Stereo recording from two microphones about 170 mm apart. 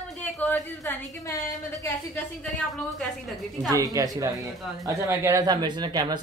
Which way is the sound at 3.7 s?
20° right (ahead or behind).